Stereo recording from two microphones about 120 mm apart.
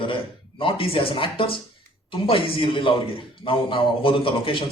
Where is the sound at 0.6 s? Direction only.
50° left (ahead or behind).